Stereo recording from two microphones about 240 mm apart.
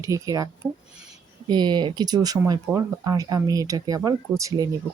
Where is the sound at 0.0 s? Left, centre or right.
Centre.